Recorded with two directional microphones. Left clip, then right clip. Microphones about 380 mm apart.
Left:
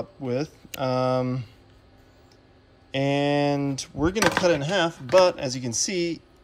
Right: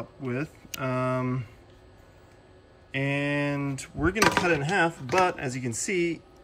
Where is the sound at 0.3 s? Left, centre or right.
Centre.